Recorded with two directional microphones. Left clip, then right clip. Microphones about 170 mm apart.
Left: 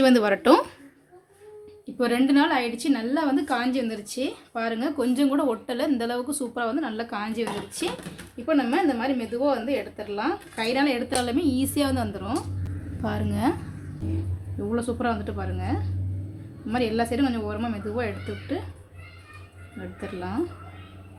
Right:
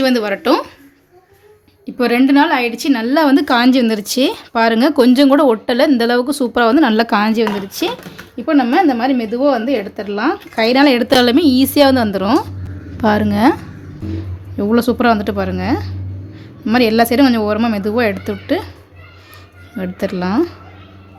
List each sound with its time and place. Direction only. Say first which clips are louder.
0.0 s speech: right 4 dB; centre (ahead or behind)
2.0 s a woman's voice: right 9 dB; 35° right (ahead or behind)
14.7 s a woman's voice: right 14 dB; 50° right (ahead or behind)
20.0 s a woman's voice: right 13 dB; 50° right (ahead or behind)